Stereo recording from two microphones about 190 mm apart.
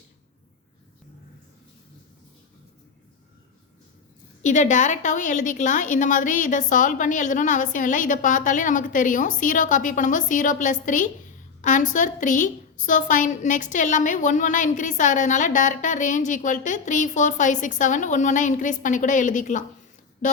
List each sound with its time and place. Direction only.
4.4 s a woman's voice: 40° left (ahead or behind)